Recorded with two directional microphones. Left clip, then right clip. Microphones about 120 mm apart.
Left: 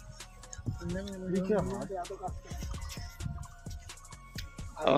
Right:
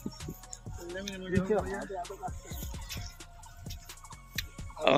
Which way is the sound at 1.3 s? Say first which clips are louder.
Right 1 dB; centre (ahead or behind).